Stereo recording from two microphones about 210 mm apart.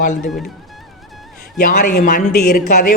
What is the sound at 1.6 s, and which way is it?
A man's voice, 45° left (ahead or behind).